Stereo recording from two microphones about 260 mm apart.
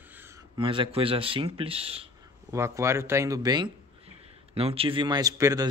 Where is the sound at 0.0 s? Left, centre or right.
Centre.